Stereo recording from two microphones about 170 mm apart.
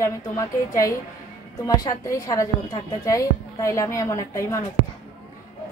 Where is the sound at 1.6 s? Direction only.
20° left (ahead or behind).